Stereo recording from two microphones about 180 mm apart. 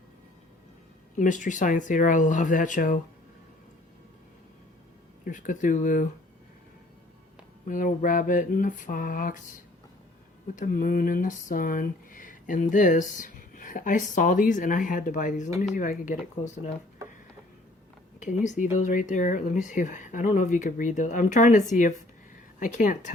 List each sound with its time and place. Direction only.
1.1 s speech: 45° left (ahead or behind)
5.2 s speech: 45° left (ahead or behind)
7.7 s speech: 45° left (ahead or behind)
10.5 s speech: 45° left (ahead or behind)
18.4 s speech: 45° left (ahead or behind)